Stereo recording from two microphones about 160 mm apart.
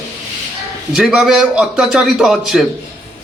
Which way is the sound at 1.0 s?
Centre (ahead or behind).